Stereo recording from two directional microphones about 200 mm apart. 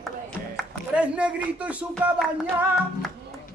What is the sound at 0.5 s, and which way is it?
Speech, 5° right (ahead or behind).